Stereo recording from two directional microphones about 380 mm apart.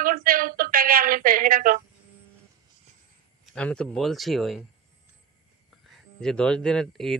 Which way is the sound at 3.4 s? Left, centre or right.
Centre.